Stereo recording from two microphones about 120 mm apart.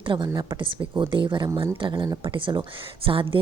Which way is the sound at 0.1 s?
40° right (ahead or behind).